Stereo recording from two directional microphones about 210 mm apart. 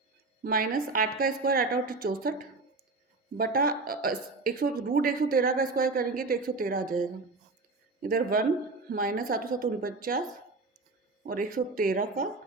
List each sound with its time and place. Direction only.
0.4 s a woman's voice: 45° right (ahead or behind)
3.3 s a woman's voice: 45° right (ahead or behind)
11.3 s a woman's voice: 45° right (ahead or behind)